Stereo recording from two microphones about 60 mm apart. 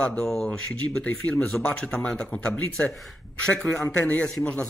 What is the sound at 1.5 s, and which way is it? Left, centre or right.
Speech, centre.